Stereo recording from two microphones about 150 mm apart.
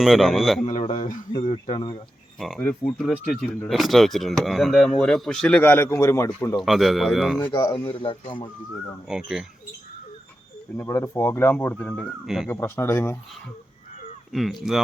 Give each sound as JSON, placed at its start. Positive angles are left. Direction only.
{"t": 0.0, "sound": "speech", "side_deg": 0}
{"t": 0.7, "sound": "speech", "side_deg": 50}
{"t": 1.6, "sound": "speech", "side_deg": 35}
{"t": 2.4, "sound": "speech", "side_deg": 5}
{"t": 6.6, "sound": "speech", "side_deg": 0}
{"t": 7.5, "sound": "speech", "side_deg": 35}
{"t": 9.0, "sound": "speech", "side_deg": -5}
{"t": 10.8, "sound": "speech", "side_deg": 20}
{"t": 12.2, "sound": "speech", "side_deg": 0}
{"t": 12.5, "sound": "speech", "side_deg": 15}
{"t": 14.3, "sound": "speech", "side_deg": 0}